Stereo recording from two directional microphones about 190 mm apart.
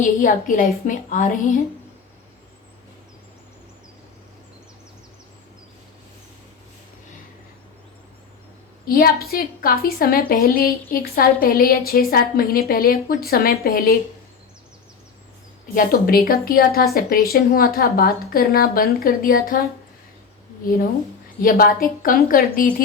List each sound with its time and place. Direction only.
0.0 s a woman's voice: 45° left (ahead or behind)
8.8 s a woman's voice: 50° left (ahead or behind)
15.7 s a woman's voice: 50° left (ahead or behind)
21.4 s a woman's voice: 50° left (ahead or behind)